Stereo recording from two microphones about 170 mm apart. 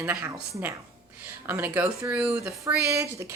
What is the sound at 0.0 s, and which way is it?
A woman's voice, 10° right (ahead or behind).